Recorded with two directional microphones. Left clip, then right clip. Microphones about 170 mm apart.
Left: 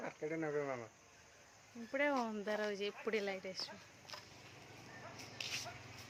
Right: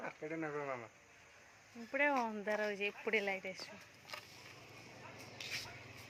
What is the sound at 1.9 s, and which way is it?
Speech, 5° left (ahead or behind).